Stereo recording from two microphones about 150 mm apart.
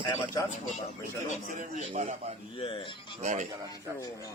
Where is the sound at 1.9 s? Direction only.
50° right (ahead or behind).